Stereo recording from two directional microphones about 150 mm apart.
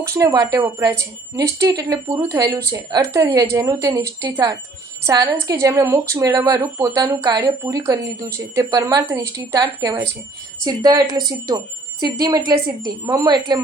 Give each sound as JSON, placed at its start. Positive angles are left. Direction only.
{"t": 0.1, "sound": "speech", "side_deg": -25}